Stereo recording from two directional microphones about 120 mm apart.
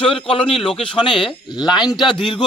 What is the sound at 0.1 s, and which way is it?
Speech, 50° left (ahead or behind).